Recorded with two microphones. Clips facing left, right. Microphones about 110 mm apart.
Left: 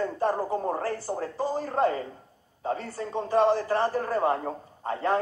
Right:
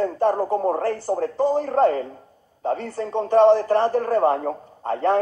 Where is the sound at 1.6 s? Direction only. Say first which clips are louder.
Right 4 dB; 60° right (ahead or behind).